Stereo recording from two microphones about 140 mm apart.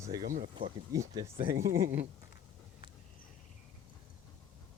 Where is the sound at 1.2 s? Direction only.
45° right (ahead or behind).